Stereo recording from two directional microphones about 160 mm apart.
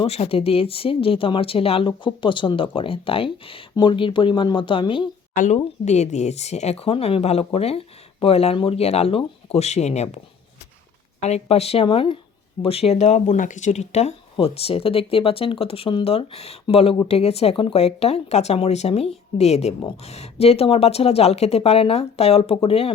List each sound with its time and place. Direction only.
0.0 s speech: 40° left (ahead or behind)
5.3 s speech: 55° left (ahead or behind)
5.5 s speech: 45° left (ahead or behind)
11.2 s speech: 40° left (ahead or behind)